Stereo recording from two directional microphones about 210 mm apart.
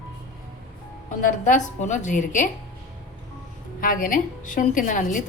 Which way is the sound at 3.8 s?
40° left (ahead or behind).